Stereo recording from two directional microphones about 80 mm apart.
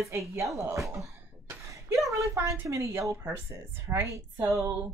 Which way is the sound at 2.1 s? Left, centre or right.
Right.